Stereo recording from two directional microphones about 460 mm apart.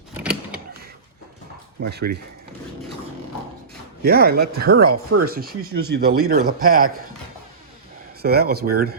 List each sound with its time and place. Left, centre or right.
1.8 s speech: right
4.0 s speech: centre
8.2 s speech: centre